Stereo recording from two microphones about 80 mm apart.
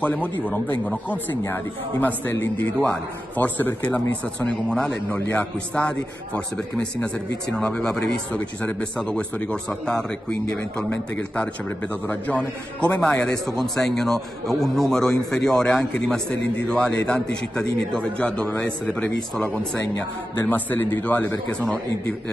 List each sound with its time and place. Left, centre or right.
0.0 s a man's voice: centre
10.9 s a man's voice: centre
20.4 s a man's voice: left